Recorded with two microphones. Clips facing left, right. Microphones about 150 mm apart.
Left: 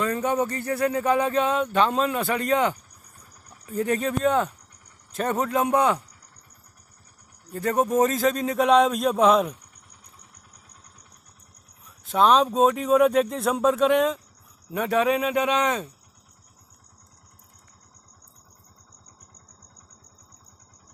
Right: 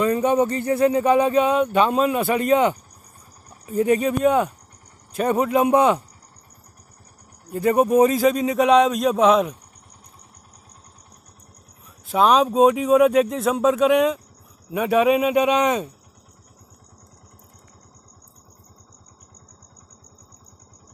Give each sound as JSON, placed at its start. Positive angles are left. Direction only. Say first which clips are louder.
{"t": 0.0, "sound": "speech", "louder": "right 6 dB", "side_deg": -20}
{"t": 7.5, "sound": "speech", "louder": "right 5 dB", "side_deg": -15}
{"t": 12.1, "sound": "speech", "louder": "right 2 dB", "side_deg": -5}